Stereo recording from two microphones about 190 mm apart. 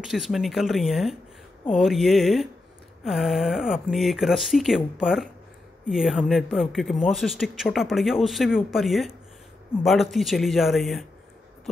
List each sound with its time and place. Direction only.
0.0 s speech: centre (ahead or behind)